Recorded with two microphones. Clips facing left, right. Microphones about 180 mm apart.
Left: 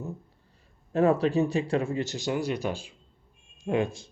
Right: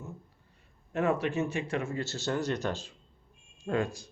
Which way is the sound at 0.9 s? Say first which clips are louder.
Left 6 dB; 35° left (ahead or behind).